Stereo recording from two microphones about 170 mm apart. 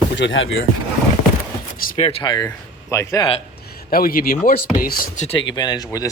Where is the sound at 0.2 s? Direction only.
90° left.